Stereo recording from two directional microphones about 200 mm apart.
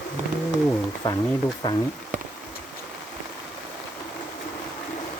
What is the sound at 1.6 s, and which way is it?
Speech, 20° left (ahead or behind).